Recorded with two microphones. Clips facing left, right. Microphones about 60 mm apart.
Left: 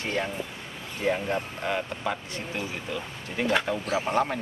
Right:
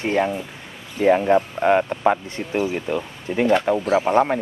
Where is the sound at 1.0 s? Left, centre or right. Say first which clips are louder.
Right 11 dB; right.